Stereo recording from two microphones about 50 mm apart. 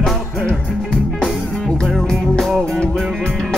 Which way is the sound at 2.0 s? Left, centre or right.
Centre.